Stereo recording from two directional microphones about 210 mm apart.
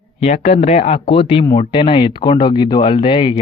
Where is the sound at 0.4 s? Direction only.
30° left (ahead or behind).